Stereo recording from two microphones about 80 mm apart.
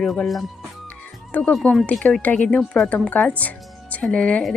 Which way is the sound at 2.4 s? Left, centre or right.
Centre.